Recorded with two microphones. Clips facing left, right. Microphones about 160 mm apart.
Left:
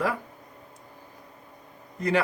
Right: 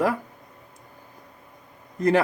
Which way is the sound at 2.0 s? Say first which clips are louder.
Right 5 dB; 50° right (ahead or behind).